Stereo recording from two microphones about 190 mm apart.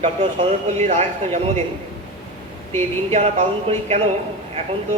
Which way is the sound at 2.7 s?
35° right (ahead or behind).